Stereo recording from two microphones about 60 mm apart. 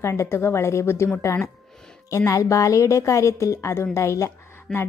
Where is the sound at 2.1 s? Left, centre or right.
Left.